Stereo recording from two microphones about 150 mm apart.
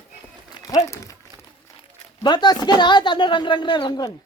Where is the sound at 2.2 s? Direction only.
30° left (ahead or behind).